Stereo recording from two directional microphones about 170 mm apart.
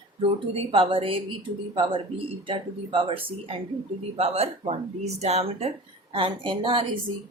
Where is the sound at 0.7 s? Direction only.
30° right (ahead or behind).